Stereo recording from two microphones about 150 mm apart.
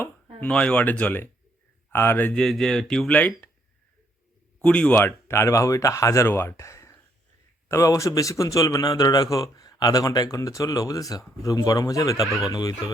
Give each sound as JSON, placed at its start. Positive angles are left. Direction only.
{"t": 0.3, "sound": "speech", "side_deg": 10}
{"t": 4.6, "sound": "speech", "side_deg": 10}
{"t": 12.2, "sound": "speech", "side_deg": 0}
{"t": 12.5, "sound": "speech", "side_deg": 25}